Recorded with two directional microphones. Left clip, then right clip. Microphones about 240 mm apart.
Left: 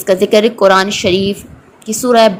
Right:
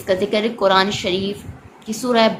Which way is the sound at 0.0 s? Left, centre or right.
Left.